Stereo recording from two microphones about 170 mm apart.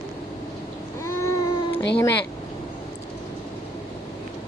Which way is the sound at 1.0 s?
15° left (ahead or behind).